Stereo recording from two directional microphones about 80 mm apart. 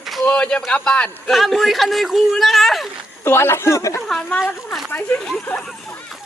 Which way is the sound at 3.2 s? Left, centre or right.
Left.